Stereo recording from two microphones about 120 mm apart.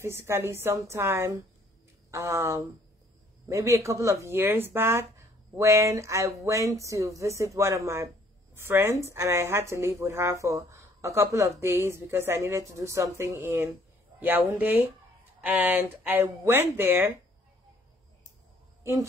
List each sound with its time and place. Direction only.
0.0 s a woman's voice: 20° right (ahead or behind)